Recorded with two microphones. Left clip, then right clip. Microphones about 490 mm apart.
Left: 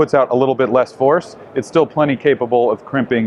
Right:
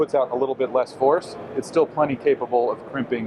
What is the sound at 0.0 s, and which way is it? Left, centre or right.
Speech, left.